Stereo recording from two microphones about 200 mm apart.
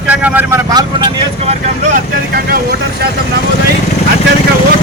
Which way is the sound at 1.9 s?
45° right (ahead or behind).